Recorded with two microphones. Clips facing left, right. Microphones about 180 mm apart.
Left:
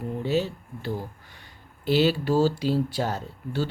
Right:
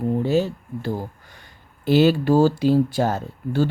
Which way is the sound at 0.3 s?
45° right (ahead or behind).